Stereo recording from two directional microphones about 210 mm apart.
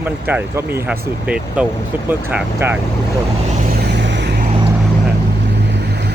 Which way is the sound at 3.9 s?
55° right (ahead or behind).